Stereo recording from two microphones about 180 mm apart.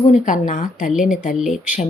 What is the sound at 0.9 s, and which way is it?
Speech, 5° right (ahead or behind).